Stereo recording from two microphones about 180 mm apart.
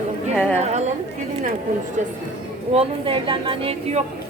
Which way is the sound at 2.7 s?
30° right (ahead or behind).